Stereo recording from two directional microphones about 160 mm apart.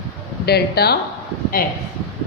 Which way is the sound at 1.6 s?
65° left (ahead or behind).